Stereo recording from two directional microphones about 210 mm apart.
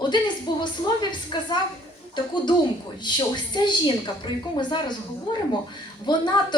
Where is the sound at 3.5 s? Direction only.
20° left (ahead or behind).